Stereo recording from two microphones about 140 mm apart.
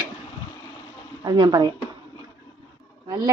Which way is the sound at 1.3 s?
30° right (ahead or behind).